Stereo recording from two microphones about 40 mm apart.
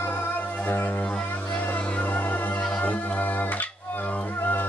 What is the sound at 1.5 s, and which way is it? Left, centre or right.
Music, left.